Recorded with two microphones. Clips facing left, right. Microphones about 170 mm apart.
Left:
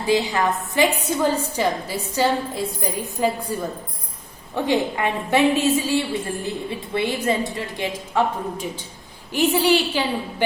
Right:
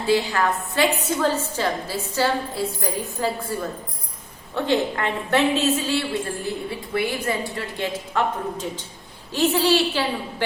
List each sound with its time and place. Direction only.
0.1 s a woman's voice: 20° left (ahead or behind)
9.3 s a woman's voice: 15° left (ahead or behind)